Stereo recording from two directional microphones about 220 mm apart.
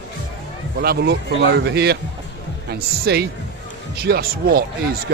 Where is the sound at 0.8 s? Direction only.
45° right (ahead or behind).